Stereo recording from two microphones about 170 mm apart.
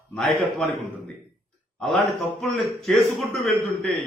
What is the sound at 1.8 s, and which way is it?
A man's voice, 5° left (ahead or behind).